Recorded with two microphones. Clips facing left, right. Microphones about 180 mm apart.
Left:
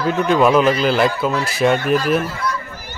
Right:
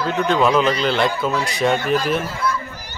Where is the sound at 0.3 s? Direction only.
5° left (ahead or behind).